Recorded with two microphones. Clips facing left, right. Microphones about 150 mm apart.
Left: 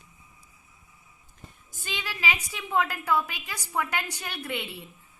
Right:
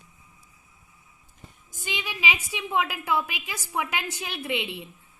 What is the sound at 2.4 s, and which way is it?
A woman's voice, 5° right (ahead or behind).